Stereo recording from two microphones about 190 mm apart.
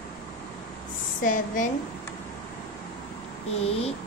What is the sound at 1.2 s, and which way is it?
Speech, 45° left (ahead or behind).